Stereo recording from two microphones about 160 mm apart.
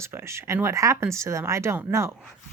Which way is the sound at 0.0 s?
15° right (ahead or behind).